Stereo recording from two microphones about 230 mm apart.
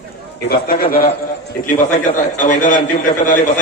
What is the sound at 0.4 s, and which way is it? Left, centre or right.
A man's voice, left.